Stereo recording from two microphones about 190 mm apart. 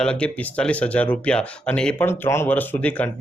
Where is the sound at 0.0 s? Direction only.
5° left (ahead or behind).